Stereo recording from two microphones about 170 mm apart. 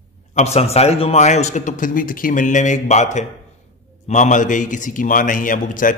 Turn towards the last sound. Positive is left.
turn(degrees=50)  # may be behind; listen again after turning